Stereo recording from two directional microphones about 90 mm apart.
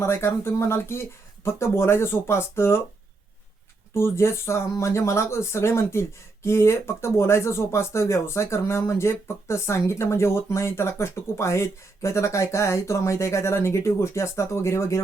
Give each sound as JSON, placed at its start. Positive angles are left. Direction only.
{"t": 0.0, "sound": "speech", "side_deg": 30}
{"t": 3.9, "sound": "speech", "side_deg": 30}